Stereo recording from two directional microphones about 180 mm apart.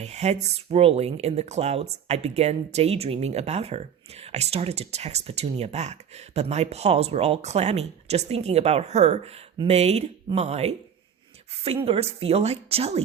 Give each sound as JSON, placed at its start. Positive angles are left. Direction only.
{"t": 0.0, "sound": "speech", "side_deg": -40}
{"t": 11.9, "sound": "speech", "side_deg": -35}